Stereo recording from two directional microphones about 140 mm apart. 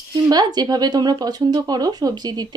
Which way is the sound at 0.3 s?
30° right (ahead or behind).